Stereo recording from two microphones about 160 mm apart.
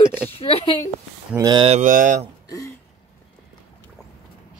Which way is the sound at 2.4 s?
20° left (ahead or behind).